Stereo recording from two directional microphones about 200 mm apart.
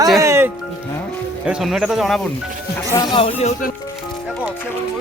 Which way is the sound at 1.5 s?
Centre (ahead or behind).